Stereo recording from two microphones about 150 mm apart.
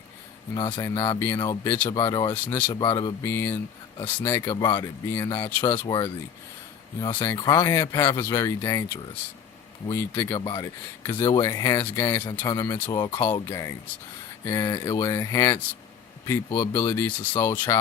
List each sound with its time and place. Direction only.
0.5 s speech: 25° left (ahead or behind)
1.9 s speech: 25° left (ahead or behind)
2.3 s speech: 15° left (ahead or behind)
2.7 s speech: 30° left (ahead or behind)
3.2 s speech: 15° left (ahead or behind)
4.6 s speech: 25° left (ahead or behind)
5.0 s speech: 15° left (ahead or behind)
7.2 s speech: 30° left (ahead or behind)